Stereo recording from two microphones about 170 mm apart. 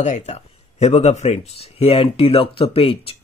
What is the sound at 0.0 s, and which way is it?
A man's voice, 40° left (ahead or behind).